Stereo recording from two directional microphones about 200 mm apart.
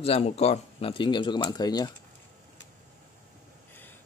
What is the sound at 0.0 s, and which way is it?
Speech, 30° left (ahead or behind).